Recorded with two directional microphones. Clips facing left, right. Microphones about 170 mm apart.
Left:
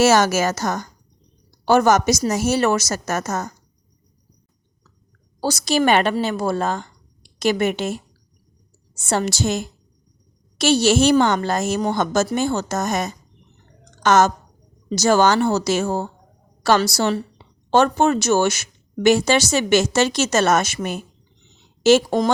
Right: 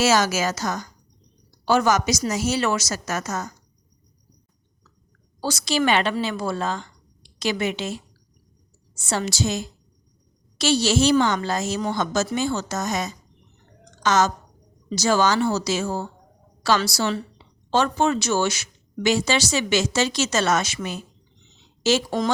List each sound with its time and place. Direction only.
0.0 s speech: 55° left (ahead or behind)
5.4 s a woman's voice: 40° left (ahead or behind)